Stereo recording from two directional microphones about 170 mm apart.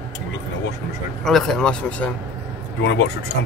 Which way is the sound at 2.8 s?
90° left.